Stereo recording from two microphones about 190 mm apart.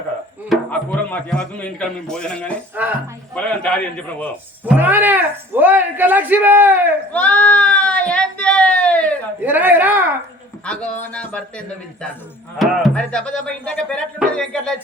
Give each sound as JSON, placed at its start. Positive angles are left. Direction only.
{"t": 0.5, "sound": "speech", "side_deg": 5}
{"t": 2.8, "sound": "speech", "side_deg": -5}
{"t": 3.3, "sound": "a man's voice", "side_deg": 5}
{"t": 4.6, "sound": "speech", "side_deg": -10}
{"t": 7.1, "sound": "a sound", "side_deg": 5}
{"t": 9.4, "sound": "speech", "side_deg": -10}
{"t": 10.7, "sound": "a man's voice", "side_deg": 5}